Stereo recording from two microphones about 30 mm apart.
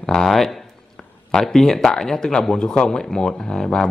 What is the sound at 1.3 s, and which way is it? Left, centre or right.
A man's voice, centre.